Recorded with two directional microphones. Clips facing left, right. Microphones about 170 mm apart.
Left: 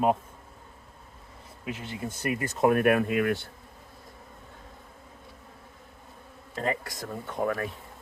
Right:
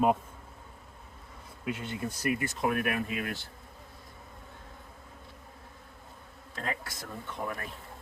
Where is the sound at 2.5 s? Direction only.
50° left (ahead or behind).